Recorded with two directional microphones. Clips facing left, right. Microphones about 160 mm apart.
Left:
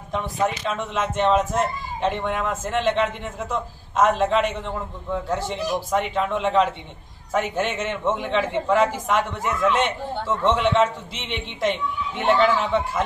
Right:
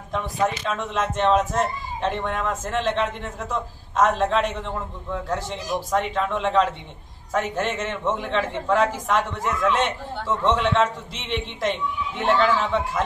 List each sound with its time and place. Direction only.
0.1 s speech: centre (ahead or behind)